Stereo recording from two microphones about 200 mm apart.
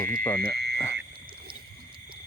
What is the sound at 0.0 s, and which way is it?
Speech, 45° right (ahead or behind).